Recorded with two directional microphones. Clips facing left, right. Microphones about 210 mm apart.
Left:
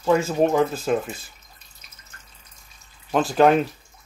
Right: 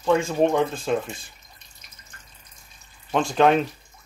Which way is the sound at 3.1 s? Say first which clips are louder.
Left 2 dB; 5° left (ahead or behind).